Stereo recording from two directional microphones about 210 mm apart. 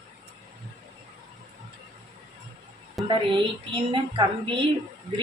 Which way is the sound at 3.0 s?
Centre (ahead or behind).